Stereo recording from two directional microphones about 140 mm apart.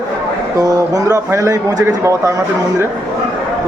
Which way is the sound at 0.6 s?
25° right (ahead or behind).